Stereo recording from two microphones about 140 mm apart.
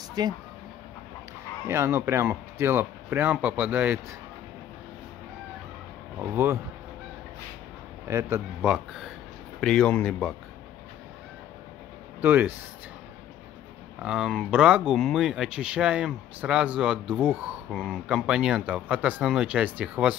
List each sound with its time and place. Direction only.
0.2 s speech: 30° right (ahead or behind)
1.7 s speech: 15° right (ahead or behind)
6.3 s speech: 20° right (ahead or behind)
8.1 s speech: 20° right (ahead or behind)
8.6 s speech: 5° right (ahead or behind)
9.6 s speech: 5° left (ahead or behind)
12.2 s speech: 15° right (ahead or behind)
14.0 s speech: 5° right (ahead or behind)